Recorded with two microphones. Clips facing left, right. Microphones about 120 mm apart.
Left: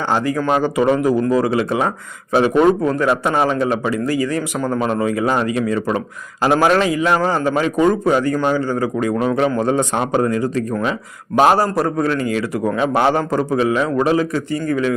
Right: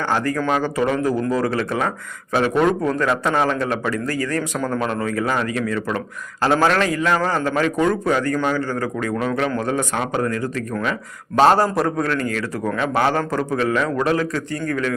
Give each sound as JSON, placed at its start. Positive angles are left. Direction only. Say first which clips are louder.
{"t": 0.1, "sound": "a man's voice", "louder": "left 4 dB", "side_deg": 15}
{"t": 11.3, "sound": "a man's voice", "louder": "left 1 dB", "side_deg": 10}